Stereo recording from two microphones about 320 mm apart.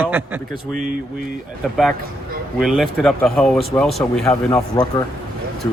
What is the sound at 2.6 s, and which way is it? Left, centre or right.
Speech, centre.